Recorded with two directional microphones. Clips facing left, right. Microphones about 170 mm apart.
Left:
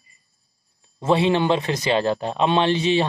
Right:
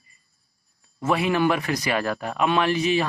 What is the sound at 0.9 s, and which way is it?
Speech, 25° left (ahead or behind).